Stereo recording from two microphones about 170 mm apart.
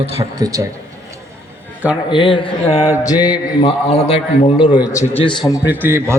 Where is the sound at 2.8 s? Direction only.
20° left (ahead or behind).